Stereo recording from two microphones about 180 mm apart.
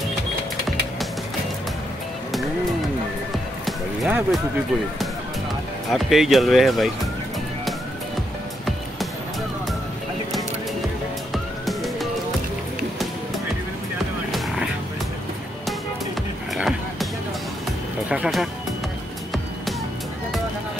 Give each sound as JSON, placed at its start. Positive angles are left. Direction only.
{"t": 3.6, "sound": "music", "side_deg": 0}
{"t": 5.9, "sound": "speech", "side_deg": 0}
{"t": 11.3, "sound": "music", "side_deg": 0}
{"t": 14.3, "sound": "music", "side_deg": 0}
{"t": 16.5, "sound": "music", "side_deg": 0}
{"t": 18.1, "sound": "speech", "side_deg": 0}